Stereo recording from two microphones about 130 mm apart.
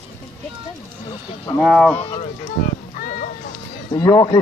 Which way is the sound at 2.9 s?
90° left.